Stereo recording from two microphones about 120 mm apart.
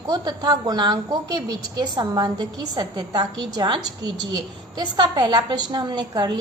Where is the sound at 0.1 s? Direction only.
35° right (ahead or behind).